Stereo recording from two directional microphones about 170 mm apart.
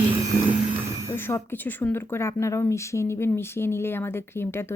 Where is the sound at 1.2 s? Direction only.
15° left (ahead or behind).